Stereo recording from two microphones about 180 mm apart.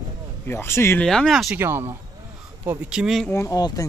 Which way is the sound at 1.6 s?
15° right (ahead or behind).